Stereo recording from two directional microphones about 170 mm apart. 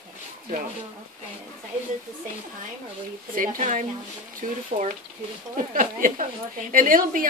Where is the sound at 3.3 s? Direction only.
50° right (ahead or behind).